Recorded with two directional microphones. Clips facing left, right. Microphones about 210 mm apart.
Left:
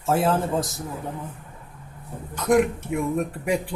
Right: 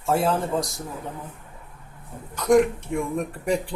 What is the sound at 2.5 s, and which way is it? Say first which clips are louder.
Speech: right 2 dB; 5° left (ahead or behind).